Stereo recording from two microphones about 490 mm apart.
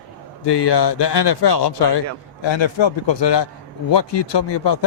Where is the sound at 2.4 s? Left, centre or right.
Left.